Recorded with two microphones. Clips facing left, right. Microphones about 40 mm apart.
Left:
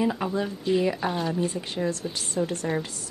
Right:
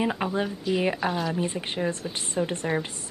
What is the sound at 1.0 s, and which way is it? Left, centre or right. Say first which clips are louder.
Speech: even; centre.